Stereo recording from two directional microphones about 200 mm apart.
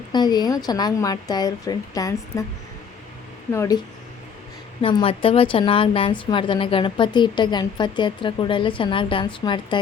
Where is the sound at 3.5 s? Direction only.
15° left (ahead or behind).